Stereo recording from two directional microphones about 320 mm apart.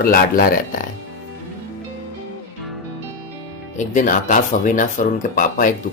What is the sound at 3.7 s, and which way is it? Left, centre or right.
Speech, left.